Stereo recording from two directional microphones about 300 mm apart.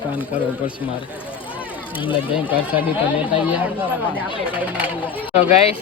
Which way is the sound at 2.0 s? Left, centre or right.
Centre.